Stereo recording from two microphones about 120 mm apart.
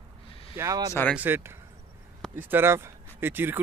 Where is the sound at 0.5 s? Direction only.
25° right (ahead or behind).